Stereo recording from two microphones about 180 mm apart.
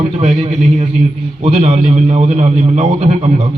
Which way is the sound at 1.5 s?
35° right (ahead or behind).